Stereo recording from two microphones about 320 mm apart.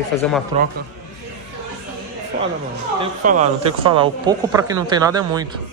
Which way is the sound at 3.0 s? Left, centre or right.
Centre.